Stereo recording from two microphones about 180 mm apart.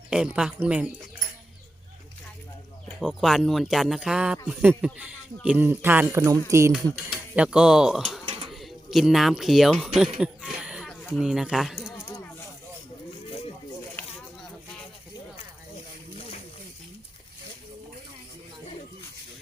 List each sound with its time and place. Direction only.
0.1 s speech: 5° right (ahead or behind)
3.0 s speech: centre (ahead or behind)
6.7 s speech: 5° right (ahead or behind)
10.2 s a sound: centre (ahead or behind)
11.2 s speech: centre (ahead or behind)